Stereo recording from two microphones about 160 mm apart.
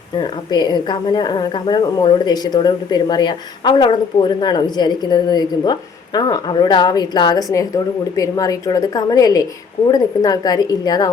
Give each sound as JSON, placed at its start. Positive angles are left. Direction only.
{"t": 0.2, "sound": "a woman's voice", "side_deg": 25}